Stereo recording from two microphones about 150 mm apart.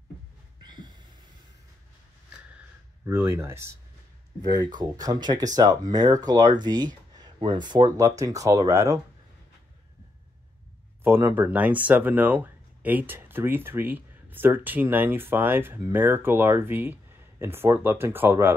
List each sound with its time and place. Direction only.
0.7 s a sound: 30° right (ahead or behind)
3.1 s speech: 15° right (ahead or behind)
4.7 s speech: 25° right (ahead or behind)
11.1 s speech: 15° right (ahead or behind)